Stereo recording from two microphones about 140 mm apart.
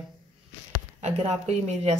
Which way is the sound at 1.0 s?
55° right (ahead or behind).